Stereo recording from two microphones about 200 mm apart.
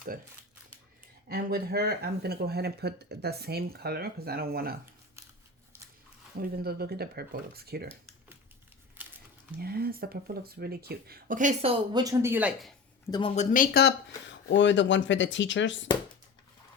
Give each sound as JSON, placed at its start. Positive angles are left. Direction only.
{"t": 1.3, "sound": "speech", "side_deg": -50}
{"t": 6.4, "sound": "speech", "side_deg": -50}
{"t": 9.0, "sound": "crumpling", "side_deg": -10}
{"t": 9.6, "sound": "speech", "side_deg": -50}
{"t": 13.1, "sound": "speech", "side_deg": 20}
{"t": 13.3, "sound": "speech", "side_deg": 40}
{"t": 14.4, "sound": "speech", "side_deg": 65}